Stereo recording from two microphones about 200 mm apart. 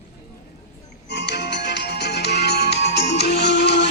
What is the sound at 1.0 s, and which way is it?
Music, 55° left (ahead or behind).